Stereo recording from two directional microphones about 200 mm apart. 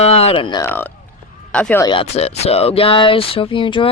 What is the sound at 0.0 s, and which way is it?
Speech, 30° left (ahead or behind).